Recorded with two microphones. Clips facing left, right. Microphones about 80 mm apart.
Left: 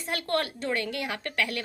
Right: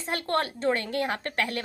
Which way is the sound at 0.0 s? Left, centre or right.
Right.